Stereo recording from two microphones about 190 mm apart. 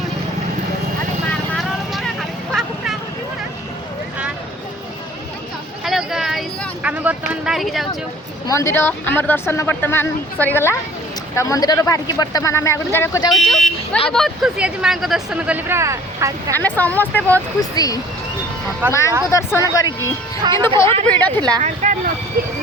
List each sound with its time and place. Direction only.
1.5 s vehicle: centre (ahead or behind)
5.8 s a sound: centre (ahead or behind)
6.8 s vehicle: 10° right (ahead or behind)
8.4 s speech: 15° left (ahead or behind)
13.3 s speech: 5° left (ahead or behind); by 16.6 s 15° right (ahead or behind)
16.6 s speech: 10° left (ahead or behind)
18.8 s speech: 10° right (ahead or behind)
19.3 s speech: 15° left (ahead or behind)
20.4 s speech: 25° right (ahead or behind)
20.8 s speech: 10° left (ahead or behind)
21.6 s speech: 40° right (ahead or behind)
22.4 s speech: 55° right (ahead or behind)